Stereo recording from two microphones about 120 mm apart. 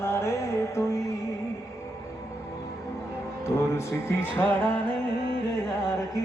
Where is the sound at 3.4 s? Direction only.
20° left (ahead or behind).